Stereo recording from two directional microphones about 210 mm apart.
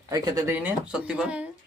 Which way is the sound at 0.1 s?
15° right (ahead or behind).